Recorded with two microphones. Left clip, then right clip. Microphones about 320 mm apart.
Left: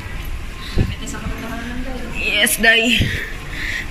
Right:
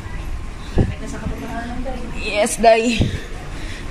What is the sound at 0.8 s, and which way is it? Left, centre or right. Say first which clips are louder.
Heart sounds: right 4 dB; right.